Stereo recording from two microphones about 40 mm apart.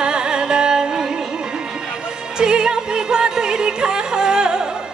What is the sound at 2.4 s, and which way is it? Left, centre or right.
Music, centre.